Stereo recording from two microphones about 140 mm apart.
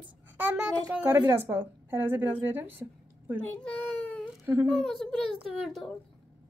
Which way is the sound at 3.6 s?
10° left (ahead or behind).